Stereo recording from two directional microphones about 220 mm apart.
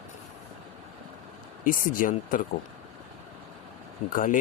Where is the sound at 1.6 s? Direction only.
40° left (ahead or behind).